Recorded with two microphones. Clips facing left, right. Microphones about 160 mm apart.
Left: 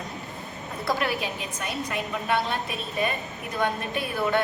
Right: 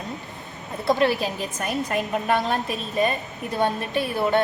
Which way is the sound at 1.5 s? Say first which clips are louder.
Right 6 dB; 45° right (ahead or behind).